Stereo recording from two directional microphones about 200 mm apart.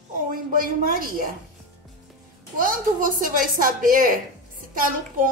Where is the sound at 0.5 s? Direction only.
45° right (ahead or behind).